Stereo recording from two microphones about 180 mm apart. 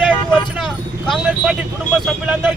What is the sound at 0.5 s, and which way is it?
Vehicle, centre (ahead or behind).